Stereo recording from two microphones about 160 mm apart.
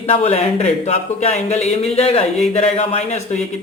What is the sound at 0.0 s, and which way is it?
Speech, 40° left (ahead or behind).